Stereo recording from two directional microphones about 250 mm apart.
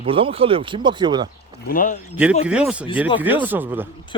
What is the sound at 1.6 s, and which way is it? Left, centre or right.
Speech, left.